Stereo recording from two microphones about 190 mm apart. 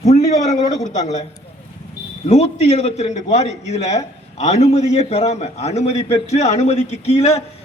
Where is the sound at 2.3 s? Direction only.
35° left (ahead or behind).